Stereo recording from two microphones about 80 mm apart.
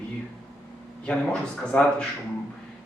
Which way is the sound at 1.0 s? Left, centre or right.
Centre.